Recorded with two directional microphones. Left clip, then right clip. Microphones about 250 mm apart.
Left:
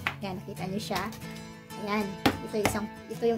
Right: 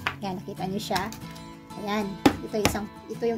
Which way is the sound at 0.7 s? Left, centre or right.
Centre.